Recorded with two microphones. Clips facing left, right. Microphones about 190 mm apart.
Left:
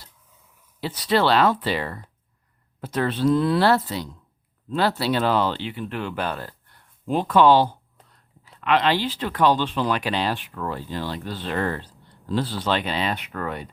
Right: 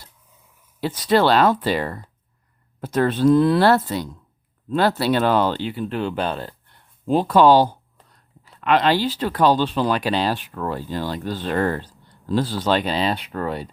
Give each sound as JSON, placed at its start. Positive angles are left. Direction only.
{"t": 0.8, "sound": "speech", "side_deg": -45}